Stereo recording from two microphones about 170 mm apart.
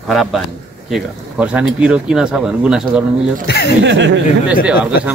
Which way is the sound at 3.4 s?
65° left (ahead or behind).